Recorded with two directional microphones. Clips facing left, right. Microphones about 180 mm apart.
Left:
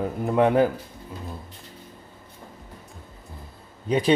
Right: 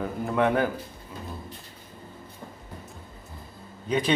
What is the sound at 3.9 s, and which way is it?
Speech, 35° left (ahead or behind).